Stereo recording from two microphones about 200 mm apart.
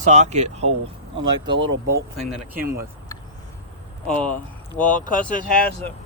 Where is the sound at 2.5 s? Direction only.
45° right (ahead or behind).